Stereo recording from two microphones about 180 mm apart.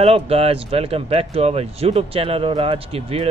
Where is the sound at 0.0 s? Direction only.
35° right (ahead or behind).